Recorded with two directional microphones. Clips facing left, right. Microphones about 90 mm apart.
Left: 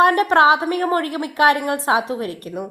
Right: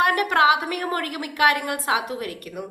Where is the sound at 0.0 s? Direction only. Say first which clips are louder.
Left 5 dB; 35° left (ahead or behind).